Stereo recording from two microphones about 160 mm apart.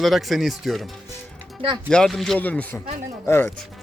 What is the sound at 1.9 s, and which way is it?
Speech, 5° left (ahead or behind).